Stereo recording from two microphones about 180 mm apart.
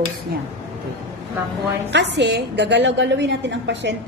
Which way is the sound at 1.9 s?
75° right (ahead or behind).